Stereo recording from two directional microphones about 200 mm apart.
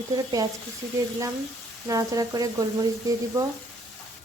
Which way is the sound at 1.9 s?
15° right (ahead or behind).